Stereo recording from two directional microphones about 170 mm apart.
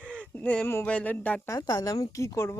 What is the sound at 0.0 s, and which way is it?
Speech, 5° left (ahead or behind).